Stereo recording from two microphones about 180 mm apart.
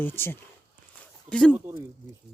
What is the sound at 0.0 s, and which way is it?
Speech, 10° left (ahead or behind).